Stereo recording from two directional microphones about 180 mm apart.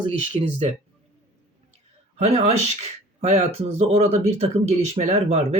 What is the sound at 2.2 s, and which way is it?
Speech, 35° right (ahead or behind).